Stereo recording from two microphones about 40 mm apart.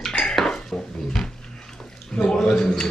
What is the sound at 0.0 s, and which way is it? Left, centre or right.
Dishes, centre.